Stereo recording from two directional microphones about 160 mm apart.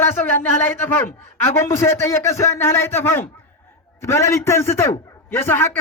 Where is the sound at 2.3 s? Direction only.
15° left (ahead or behind).